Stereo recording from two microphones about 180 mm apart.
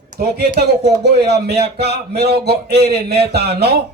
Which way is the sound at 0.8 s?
65° right (ahead or behind).